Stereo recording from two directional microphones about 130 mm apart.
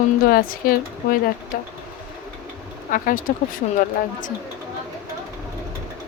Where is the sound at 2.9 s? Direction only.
90° left.